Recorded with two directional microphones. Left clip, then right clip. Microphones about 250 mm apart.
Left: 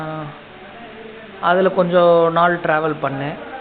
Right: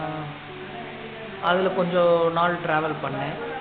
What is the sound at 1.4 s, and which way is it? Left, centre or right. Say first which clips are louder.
A man's voice: left 7 dB; left.